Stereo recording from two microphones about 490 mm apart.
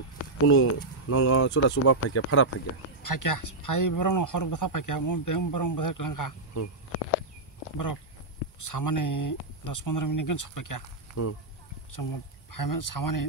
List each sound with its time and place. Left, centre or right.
0.5 s speech: left
3.0 s speech: left
7.7 s speech: left